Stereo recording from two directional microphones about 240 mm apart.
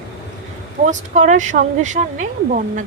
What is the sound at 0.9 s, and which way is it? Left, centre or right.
Speech, right.